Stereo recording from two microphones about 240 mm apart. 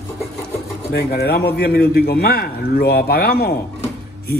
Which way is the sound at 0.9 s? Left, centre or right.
Left.